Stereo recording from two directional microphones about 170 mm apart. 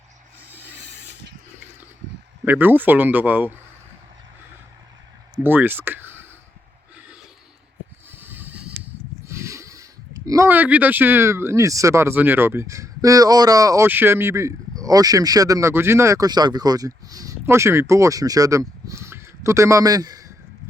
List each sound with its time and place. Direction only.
2.4 s speech: 10° right (ahead or behind)
5.4 s speech: 10° right (ahead or behind)
8.1 s a sound: 10° right (ahead or behind)
9.2 s speech: 15° right (ahead or behind)